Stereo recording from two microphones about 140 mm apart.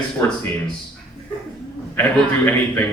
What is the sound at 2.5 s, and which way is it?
Speech, 15° left (ahead or behind).